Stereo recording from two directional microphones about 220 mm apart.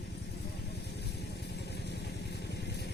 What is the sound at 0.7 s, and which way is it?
Vehicle, 50° left (ahead or behind).